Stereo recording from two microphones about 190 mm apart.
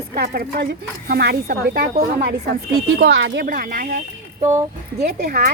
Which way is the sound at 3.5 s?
50° right (ahead or behind).